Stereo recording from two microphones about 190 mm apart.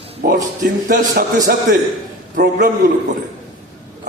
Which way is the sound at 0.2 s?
55° right (ahead or behind).